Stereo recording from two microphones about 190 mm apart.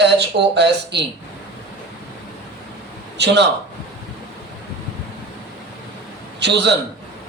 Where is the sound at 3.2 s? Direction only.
65° right (ahead or behind).